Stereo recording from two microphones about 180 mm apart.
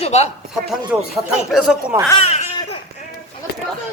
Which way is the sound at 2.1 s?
35° left (ahead or behind).